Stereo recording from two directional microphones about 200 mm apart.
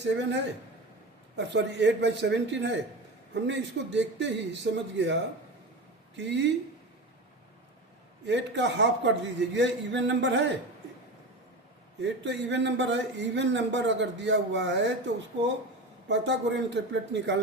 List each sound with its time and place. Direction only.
0.0 s speech: 60° right (ahead or behind)
6.1 s speech: 60° right (ahead or behind)
8.2 s speech: 60° right (ahead or behind)
12.0 s speech: 60° right (ahead or behind)